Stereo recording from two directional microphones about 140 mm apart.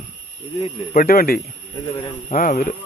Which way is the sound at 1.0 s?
90° left.